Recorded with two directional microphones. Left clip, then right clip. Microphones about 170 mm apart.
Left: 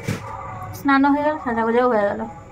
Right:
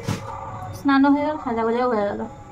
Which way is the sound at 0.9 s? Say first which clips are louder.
Left 2 dB; 30° left (ahead or behind).